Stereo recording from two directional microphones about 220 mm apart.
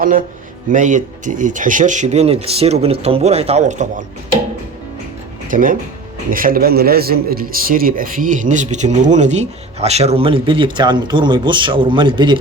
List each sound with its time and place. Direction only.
0.0 s a man's voice: 40° right (ahead or behind)
5.5 s a man's voice: 35° right (ahead or behind); by 12.4 s 20° right (ahead or behind)